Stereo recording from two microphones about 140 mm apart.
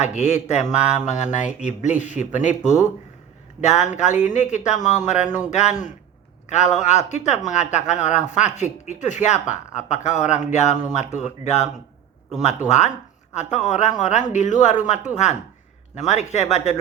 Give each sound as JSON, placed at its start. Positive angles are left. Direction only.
{"t": 0.0, "sound": "speech", "side_deg": 55}